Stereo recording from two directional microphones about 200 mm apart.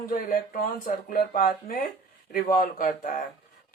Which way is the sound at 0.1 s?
45° left (ahead or behind).